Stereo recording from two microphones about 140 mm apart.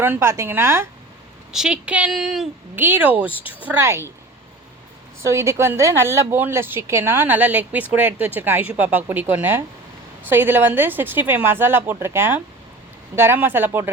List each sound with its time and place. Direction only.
0.0 s a woman's voice: 15° right (ahead or behind)
1.5 s a woman's voice: 5° right (ahead or behind)
2.7 s a woman's voice: 15° right (ahead or behind)
5.2 s a woman's voice: 20° right (ahead or behind)